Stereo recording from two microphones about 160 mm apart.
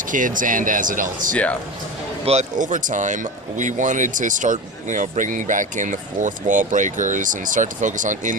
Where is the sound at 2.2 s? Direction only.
45° right (ahead or behind).